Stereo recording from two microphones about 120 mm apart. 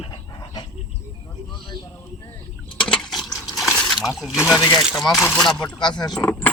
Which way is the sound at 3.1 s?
Centre (ahead or behind).